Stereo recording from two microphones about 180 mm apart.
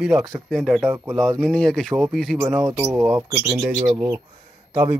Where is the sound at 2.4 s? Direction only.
15° right (ahead or behind).